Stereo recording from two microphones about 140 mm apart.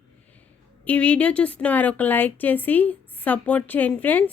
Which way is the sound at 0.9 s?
10° left (ahead or behind).